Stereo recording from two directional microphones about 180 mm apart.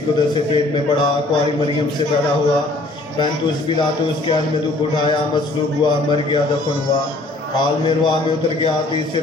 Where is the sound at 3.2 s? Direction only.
25° left (ahead or behind).